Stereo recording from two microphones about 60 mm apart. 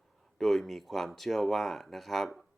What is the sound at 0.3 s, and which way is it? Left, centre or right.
Speech, centre.